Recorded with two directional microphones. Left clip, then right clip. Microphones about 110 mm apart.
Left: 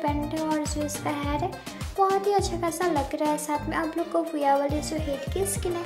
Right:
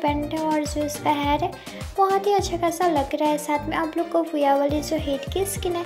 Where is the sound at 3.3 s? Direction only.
20° right (ahead or behind).